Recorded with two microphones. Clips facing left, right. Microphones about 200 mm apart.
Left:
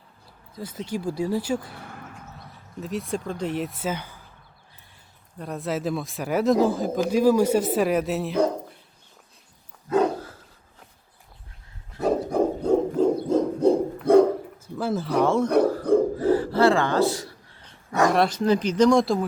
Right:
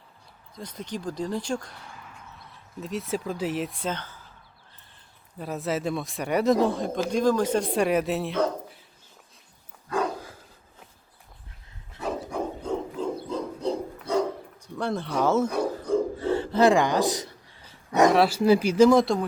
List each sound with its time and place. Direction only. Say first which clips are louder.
0.5 s speech: left 4 dB; 5° left (ahead or behind)
1.7 s a sound: left 5 dB; 60° left (ahead or behind)
2.8 s speech: left 1 dB; centre (ahead or behind)
5.4 s speech: even; centre (ahead or behind)
11.9 s dog: left 8 dB; 40° left (ahead or behind); by 14.3 s 55° left (ahead or behind)
14.8 s speech: left 4 dB; 5° left (ahead or behind)
15.4 s throat clearing: left 7 dB; 60° left (ahead or behind)
16.1 s a sound: left 3 dB; 25° right (ahead or behind)
18.1 s speech: right 1 dB; 5° right (ahead or behind)